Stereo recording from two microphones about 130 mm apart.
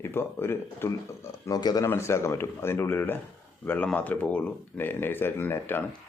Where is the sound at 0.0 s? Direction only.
15° left (ahead or behind).